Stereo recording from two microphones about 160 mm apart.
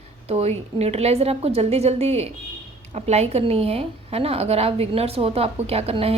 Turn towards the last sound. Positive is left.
turn(degrees=-40)  # may be behind; listen again after turning